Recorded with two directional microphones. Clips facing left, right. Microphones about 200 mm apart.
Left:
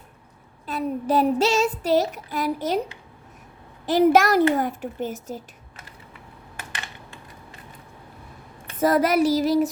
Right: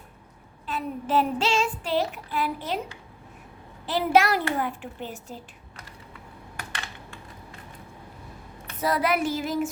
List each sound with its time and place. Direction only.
0.7 s child singing: 40° left (ahead or behind)
3.8 s speech: 45° left (ahead or behind)
8.8 s child singing: 45° left (ahead or behind)